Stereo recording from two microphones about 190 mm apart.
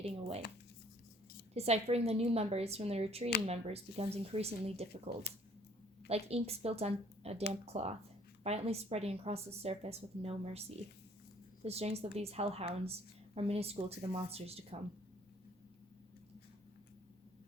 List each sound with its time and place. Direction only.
0.0 s a woman's voice: 30° right (ahead or behind)
1.5 s a woman's voice: 35° right (ahead or behind)
10.8 s speech: 60° left (ahead or behind)
11.6 s a woman's voice: 35° right (ahead or behind)